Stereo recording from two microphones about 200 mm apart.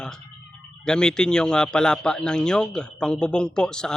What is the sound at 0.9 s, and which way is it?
A man's voice, 5° left (ahead or behind).